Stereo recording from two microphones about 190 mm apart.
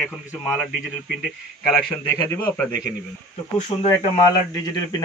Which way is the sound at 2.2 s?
10° left (ahead or behind).